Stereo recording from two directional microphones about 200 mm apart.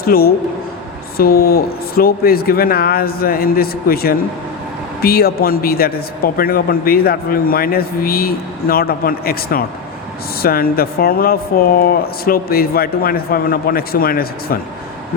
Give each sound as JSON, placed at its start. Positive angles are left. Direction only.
{"t": 0.0, "sound": "a man's voice", "side_deg": 50}